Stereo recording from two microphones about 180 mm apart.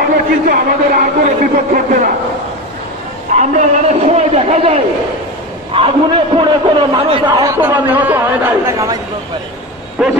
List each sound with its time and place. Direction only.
0.5 s a man's voice: 55° right (ahead or behind)
3.3 s a sound: 40° right (ahead or behind)
5.7 s a man's voice: 30° right (ahead or behind)
10.0 s bow-wow: centre (ahead or behind)